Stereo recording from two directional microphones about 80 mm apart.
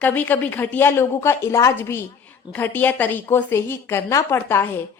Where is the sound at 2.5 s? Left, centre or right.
Left.